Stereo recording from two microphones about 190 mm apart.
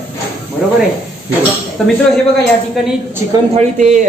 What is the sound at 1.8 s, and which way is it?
Speech, centre (ahead or behind).